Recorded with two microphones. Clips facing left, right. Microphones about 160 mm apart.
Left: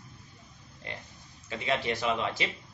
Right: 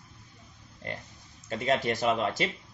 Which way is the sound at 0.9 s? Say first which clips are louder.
Right 4 dB; 45° right (ahead or behind).